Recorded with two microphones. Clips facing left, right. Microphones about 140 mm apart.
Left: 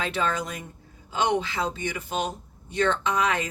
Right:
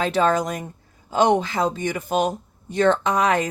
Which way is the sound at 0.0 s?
40° right (ahead or behind).